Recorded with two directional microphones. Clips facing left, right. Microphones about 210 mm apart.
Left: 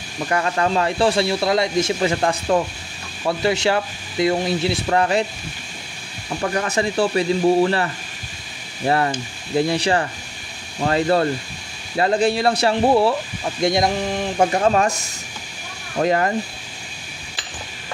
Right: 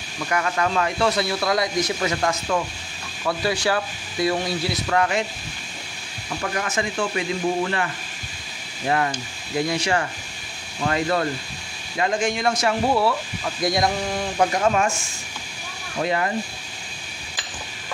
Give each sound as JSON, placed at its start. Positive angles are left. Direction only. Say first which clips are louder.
{"t": 0.3, "sound": "speech", "louder": "left 3 dB", "side_deg": 30}
{"t": 6.4, "sound": "speech", "louder": "left 5 dB", "side_deg": 35}
{"t": 16.0, "sound": "speech", "louder": "left 5 dB", "side_deg": 45}